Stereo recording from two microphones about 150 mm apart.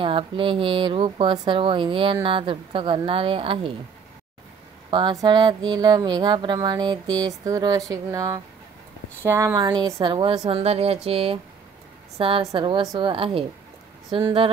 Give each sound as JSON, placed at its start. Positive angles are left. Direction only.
{"t": 0.0, "sound": "speech", "side_deg": -35}
{"t": 4.9, "sound": "speech", "side_deg": -30}
{"t": 10.1, "sound": "speech", "side_deg": -40}